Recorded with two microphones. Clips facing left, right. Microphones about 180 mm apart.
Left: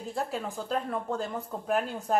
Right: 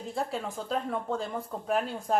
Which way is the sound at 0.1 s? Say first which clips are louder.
Even; centre (ahead or behind).